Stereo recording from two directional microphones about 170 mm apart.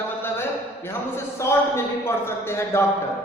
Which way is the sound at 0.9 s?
15° left (ahead or behind).